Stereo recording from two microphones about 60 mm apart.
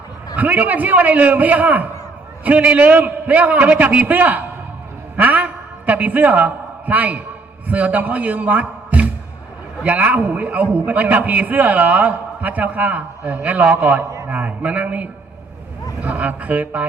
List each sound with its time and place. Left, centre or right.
0.3 s a man's voice: right